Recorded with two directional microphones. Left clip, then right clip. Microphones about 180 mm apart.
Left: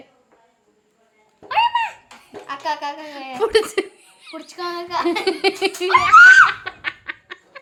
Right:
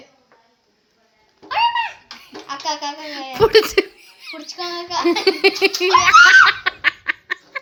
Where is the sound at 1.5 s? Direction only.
30° left (ahead or behind).